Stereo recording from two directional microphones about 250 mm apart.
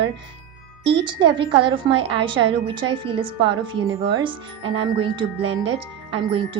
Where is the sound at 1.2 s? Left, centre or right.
Centre.